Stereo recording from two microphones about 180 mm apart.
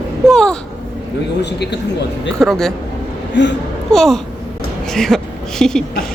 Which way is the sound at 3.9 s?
Centre (ahead or behind).